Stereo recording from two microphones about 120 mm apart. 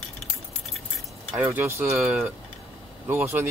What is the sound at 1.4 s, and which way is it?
Speech, 25° right (ahead or behind).